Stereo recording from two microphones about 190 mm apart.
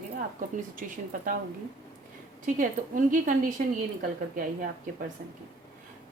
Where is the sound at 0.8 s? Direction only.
45° right (ahead or behind).